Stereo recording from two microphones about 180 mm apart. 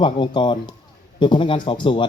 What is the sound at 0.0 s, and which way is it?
A man's voice, 25° left (ahead or behind).